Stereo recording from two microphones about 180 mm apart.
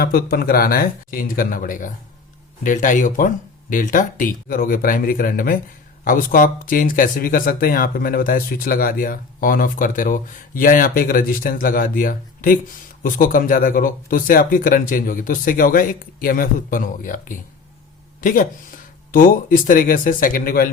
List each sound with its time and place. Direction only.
0.0 s speech: 55° left (ahead or behind)